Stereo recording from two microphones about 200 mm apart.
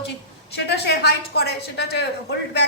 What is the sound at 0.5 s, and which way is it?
A woman's voice, 55° left (ahead or behind).